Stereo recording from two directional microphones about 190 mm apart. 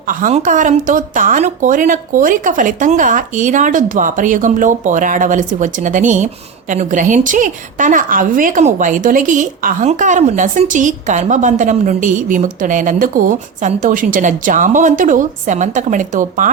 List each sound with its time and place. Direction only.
0.1 s speech: 40° right (ahead or behind)